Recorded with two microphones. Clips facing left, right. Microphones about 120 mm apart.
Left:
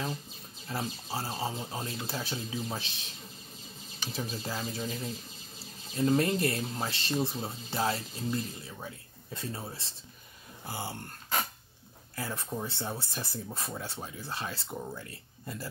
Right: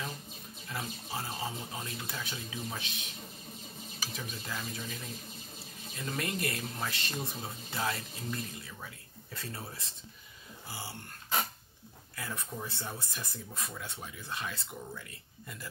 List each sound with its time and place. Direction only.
0.7 s speech: 30° left (ahead or behind)
4.1 s speech: 30° left (ahead or behind)
10.7 s speech: 50° left (ahead or behind)
12.5 s speech: 25° left (ahead or behind)